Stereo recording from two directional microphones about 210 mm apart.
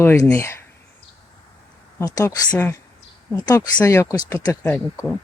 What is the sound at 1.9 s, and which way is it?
Speech, 15° left (ahead or behind).